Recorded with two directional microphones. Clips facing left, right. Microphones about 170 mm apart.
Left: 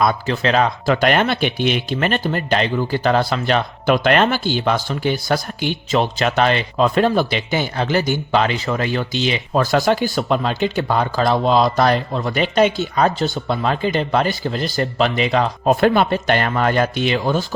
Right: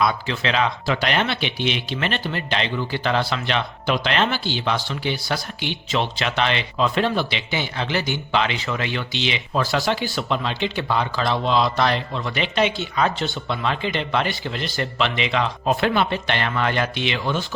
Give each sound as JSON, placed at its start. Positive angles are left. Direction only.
{"t": 0.0, "sound": "speech", "side_deg": 45}